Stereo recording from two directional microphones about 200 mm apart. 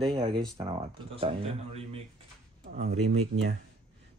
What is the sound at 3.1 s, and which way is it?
Speech, 90° right.